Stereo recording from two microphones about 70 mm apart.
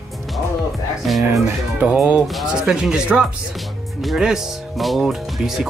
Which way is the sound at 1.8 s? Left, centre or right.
Centre.